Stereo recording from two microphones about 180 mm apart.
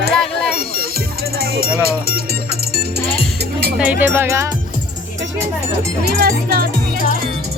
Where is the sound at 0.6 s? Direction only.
55° right (ahead or behind).